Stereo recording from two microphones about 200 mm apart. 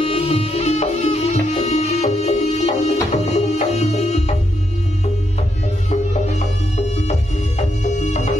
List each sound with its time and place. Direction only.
0.0 s music: 30° left (ahead or behind)
7.0 s music: 35° left (ahead or behind)